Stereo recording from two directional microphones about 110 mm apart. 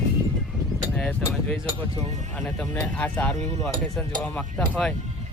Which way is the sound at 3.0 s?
15° left (ahead or behind).